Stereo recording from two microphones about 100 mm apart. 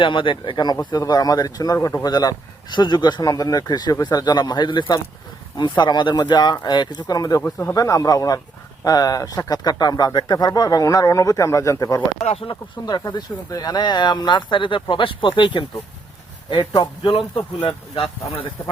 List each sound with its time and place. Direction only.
0.0 s speech: 55° left (ahead or behind); by 7.4 s 40° left (ahead or behind)
7.4 s speech: 20° left (ahead or behind)
7.8 s speech: 35° left (ahead or behind)
12.2 s speech: 80° left
12.8 s speech: 45° left (ahead or behind)
17.6 s speech: 65° left (ahead or behind)